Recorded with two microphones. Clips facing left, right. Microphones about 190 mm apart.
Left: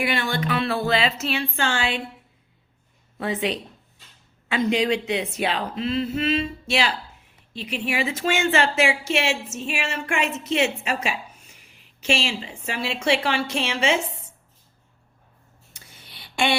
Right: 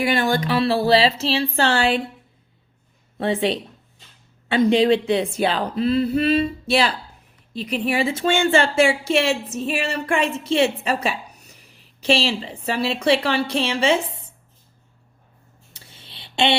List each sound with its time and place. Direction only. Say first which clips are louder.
0.0 s speech: right 5 dB; 40° right (ahead or behind)
3.2 s speech: right 4 dB; 30° right (ahead or behind)
15.7 s a sound: right 2 dB; 30° right (ahead or behind)